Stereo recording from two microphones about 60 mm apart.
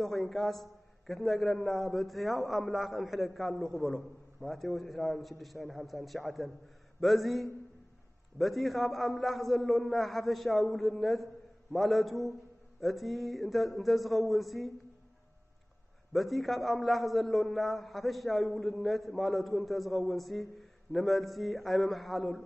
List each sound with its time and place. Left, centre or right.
0.0 s a man's voice: centre
16.1 s a man's voice: centre